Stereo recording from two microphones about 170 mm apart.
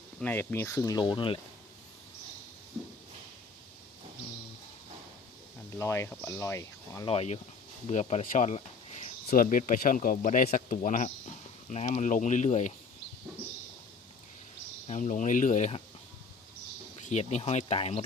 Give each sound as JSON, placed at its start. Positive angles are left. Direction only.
{"t": 0.2, "sound": "speech", "side_deg": 10}
{"t": 5.7, "sound": "speech", "side_deg": 15}
{"t": 7.1, "sound": "speech", "side_deg": 35}
{"t": 9.3, "sound": "speech", "side_deg": 55}
{"t": 14.8, "sound": "speech", "side_deg": 45}
{"t": 17.1, "sound": "speech", "side_deg": 40}